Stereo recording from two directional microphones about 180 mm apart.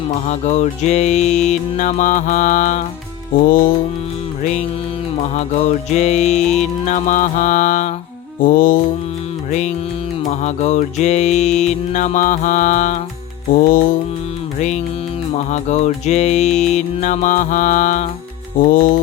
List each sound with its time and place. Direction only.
0.1 s music: 40° left (ahead or behind)
5.2 s music: 40° left (ahead or behind)
8.4 s mantra: 50° left (ahead or behind)
9.5 s music: 40° left (ahead or behind)
13.5 s mantra: 50° left (ahead or behind)
15.4 s music: 40° left (ahead or behind)
18.6 s mantra: 50° left (ahead or behind)